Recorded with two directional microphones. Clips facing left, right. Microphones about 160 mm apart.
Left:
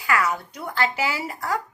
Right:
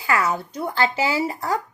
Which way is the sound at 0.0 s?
25° right (ahead or behind).